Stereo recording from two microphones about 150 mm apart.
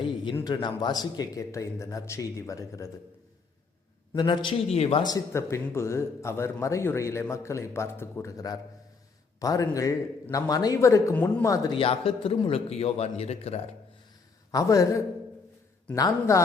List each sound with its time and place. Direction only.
0.4 s a man's voice: 30° left (ahead or behind)
4.1 s a man's voice: 30° left (ahead or behind)
5.1 s a man's voice: 20° left (ahead or behind)
11.7 s a man's voice: 35° left (ahead or behind)
14.5 s a man's voice: 20° left (ahead or behind)